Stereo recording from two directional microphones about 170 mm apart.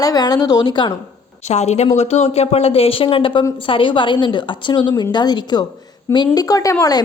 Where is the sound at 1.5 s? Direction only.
40° left (ahead or behind).